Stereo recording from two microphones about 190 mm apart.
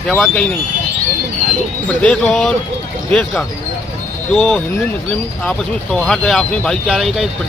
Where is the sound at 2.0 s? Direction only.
5° left (ahead or behind).